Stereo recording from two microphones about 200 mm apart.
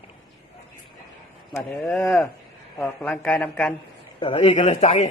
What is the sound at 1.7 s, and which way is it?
Speech, 5° left (ahead or behind).